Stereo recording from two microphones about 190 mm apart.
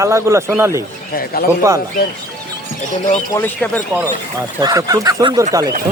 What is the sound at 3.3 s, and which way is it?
Speech, 15° left (ahead or behind).